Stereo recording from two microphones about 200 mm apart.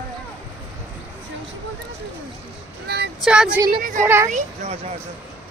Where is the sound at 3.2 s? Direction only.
5° right (ahead or behind).